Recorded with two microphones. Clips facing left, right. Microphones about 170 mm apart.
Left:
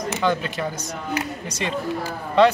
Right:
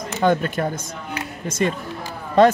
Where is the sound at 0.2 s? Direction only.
50° right (ahead or behind).